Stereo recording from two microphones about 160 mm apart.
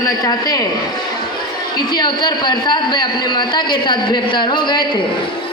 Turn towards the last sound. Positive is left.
turn(degrees=30)  # may be behind; listen again after turning